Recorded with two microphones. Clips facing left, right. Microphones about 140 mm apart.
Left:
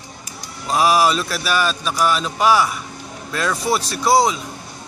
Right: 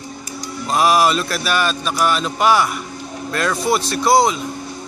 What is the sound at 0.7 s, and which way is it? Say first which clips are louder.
A man's voice: right 1 dB; 5° left (ahead or behind).